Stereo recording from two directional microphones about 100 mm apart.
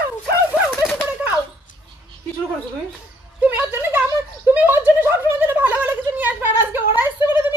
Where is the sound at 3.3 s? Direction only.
20° right (ahead or behind).